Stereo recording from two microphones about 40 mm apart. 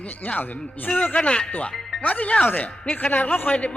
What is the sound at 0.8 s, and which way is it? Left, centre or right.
A man's voice, left.